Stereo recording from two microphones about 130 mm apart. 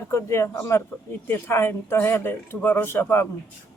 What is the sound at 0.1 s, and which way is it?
Speech, 20° left (ahead or behind).